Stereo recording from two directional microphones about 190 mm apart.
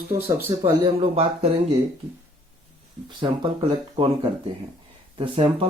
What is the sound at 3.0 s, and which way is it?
Speech, 25° right (ahead or behind).